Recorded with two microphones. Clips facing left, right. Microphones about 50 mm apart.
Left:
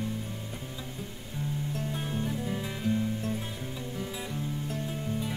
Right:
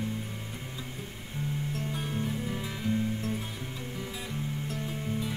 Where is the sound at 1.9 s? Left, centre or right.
Centre.